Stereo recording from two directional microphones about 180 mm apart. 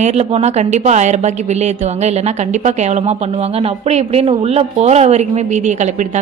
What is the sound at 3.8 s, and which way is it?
Speech, 35° right (ahead or behind).